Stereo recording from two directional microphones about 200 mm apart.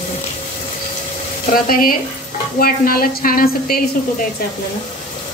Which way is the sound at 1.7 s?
45° left (ahead or behind).